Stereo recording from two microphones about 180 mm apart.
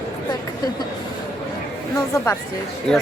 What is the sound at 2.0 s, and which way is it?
Speech, 15° left (ahead or behind).